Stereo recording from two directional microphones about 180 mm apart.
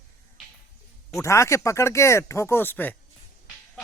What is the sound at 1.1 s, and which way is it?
Speech, 15° left (ahead or behind).